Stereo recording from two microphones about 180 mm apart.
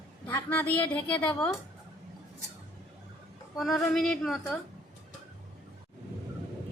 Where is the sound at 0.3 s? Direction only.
10° left (ahead or behind).